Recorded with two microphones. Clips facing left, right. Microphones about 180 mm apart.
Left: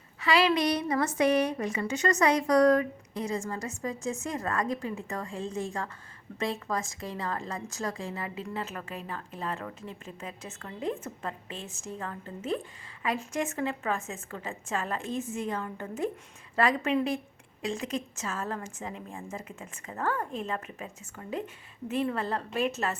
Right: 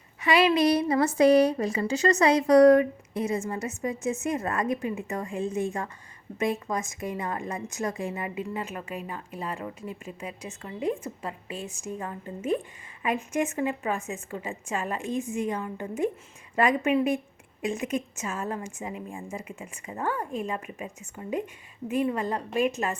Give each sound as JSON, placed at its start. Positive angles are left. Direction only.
{"t": 0.2, "sound": "a woman's voice", "side_deg": -20}